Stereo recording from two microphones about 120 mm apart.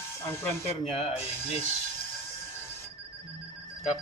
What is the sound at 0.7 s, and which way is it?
Speech, 55° left (ahead or behind).